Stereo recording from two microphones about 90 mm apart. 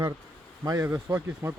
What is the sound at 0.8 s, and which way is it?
Speech, 20° right (ahead or behind).